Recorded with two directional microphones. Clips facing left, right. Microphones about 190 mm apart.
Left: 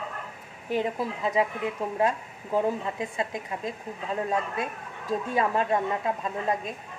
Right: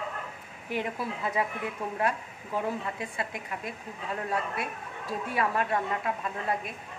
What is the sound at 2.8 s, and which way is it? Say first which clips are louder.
Speech: left 4 dB; 25° left (ahead or behind).